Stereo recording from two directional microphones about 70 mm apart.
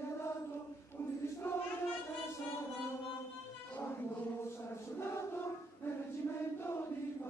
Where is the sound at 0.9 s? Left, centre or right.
Left.